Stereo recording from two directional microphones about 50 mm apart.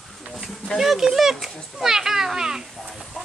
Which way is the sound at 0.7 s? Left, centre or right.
Centre.